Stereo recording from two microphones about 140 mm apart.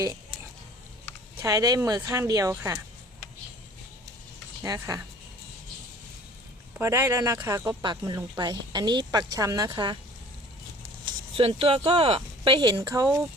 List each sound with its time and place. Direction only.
1.4 s speech: 25° right (ahead or behind)
4.6 s speech: 25° right (ahead or behind)
6.7 s speech: 15° right (ahead or behind)
11.0 s a sound: 40° right (ahead or behind)
11.9 s speech: 45° right (ahead or behind)
12.7 s speech: 20° right (ahead or behind)